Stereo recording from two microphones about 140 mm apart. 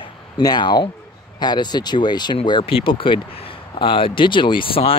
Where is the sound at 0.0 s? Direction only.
30° left (ahead or behind).